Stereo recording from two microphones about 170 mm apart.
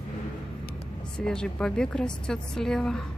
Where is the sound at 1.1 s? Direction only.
5° left (ahead or behind).